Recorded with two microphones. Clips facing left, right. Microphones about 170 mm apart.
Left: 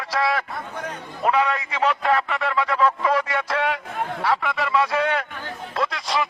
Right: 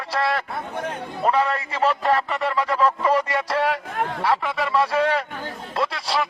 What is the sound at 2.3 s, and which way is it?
Speech, centre (ahead or behind).